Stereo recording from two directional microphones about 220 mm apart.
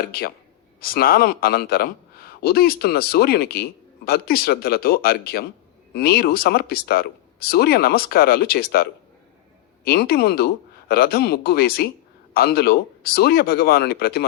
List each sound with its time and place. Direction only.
0.1 s speech: 45° left (ahead or behind)